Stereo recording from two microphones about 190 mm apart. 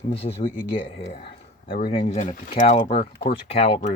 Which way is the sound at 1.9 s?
35° left (ahead or behind).